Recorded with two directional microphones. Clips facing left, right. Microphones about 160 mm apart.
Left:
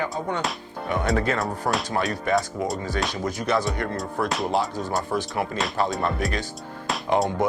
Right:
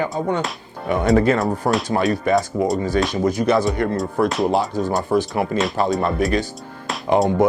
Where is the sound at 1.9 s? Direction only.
15° right (ahead or behind).